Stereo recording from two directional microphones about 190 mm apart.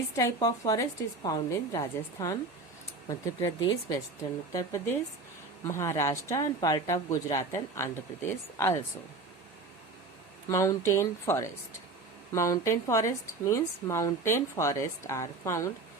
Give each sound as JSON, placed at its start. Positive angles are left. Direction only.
{"t": 0.2, "sound": "speech", "side_deg": 20}
{"t": 10.5, "sound": "speech", "side_deg": 15}